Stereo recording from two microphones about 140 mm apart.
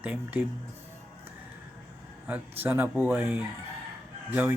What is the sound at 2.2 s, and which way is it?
Speech, 10° right (ahead or behind).